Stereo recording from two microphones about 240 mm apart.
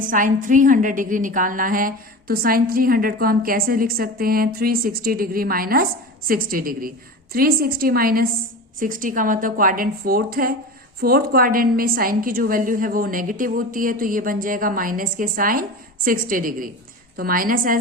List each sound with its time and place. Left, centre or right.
0.1 s a woman's voice: right